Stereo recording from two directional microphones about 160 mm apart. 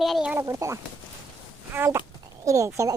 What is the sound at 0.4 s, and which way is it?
A child's voice, 20° right (ahead or behind).